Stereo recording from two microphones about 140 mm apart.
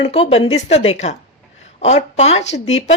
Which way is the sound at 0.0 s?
45° left (ahead or behind).